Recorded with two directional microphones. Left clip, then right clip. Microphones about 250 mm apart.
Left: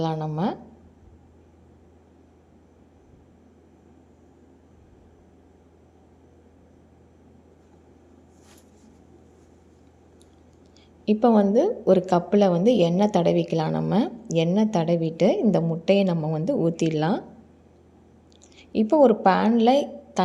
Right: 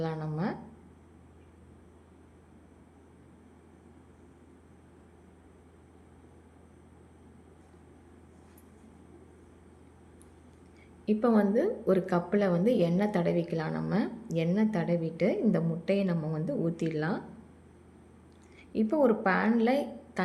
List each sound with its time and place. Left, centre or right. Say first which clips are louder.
0.0 s a woman's voice: left 8 dB; left
11.0 s a woman's voice: left 7 dB; left
18.5 s a woman's voice: left 9 dB; left